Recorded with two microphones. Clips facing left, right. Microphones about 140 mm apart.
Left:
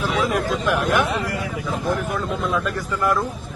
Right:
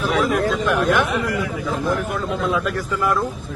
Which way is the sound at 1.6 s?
Centre (ahead or behind).